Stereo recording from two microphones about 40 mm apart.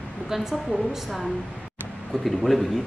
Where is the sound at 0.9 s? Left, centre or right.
Centre.